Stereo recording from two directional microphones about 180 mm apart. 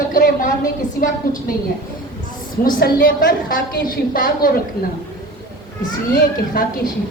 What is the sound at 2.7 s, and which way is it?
A woman's voice, 50° left (ahead or behind).